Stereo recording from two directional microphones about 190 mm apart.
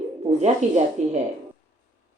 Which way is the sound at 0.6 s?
35° right (ahead or behind).